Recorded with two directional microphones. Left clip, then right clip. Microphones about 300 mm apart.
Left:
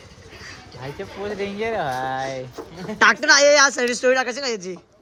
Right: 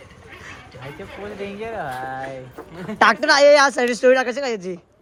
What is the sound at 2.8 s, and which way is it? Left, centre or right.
Speech, centre.